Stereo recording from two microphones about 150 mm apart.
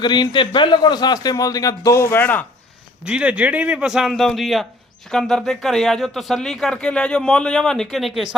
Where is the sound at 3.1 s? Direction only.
5° right (ahead or behind).